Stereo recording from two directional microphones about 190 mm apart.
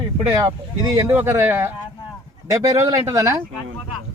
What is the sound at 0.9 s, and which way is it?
Speech, 15° right (ahead or behind).